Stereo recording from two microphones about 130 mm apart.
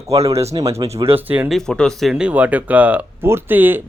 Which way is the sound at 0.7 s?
50° right (ahead or behind).